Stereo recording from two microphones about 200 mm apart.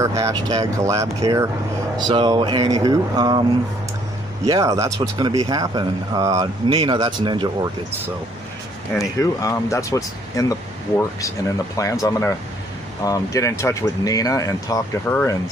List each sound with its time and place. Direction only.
0.0 s speech: 15° right (ahead or behind)
4.5 s speech: 15° right (ahead or behind)
9.2 s speech: 15° left (ahead or behind)